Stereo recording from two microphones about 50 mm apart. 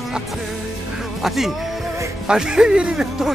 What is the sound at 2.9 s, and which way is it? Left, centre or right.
Speech, centre.